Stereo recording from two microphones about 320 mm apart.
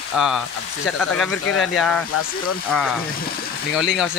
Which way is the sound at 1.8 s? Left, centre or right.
Centre.